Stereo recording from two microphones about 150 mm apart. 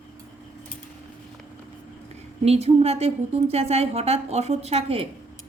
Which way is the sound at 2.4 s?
45° right (ahead or behind).